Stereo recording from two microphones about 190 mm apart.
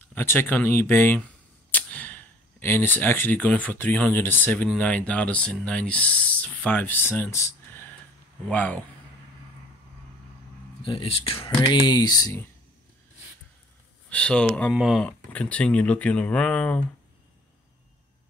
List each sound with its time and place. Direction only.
0.0 s speech: 10° left (ahead or behind)
10.8 s speech: 30° left (ahead or behind)
14.0 s speech: 5° left (ahead or behind)